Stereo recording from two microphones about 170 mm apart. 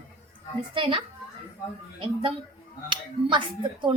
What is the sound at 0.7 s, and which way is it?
Speech, 30° right (ahead or behind).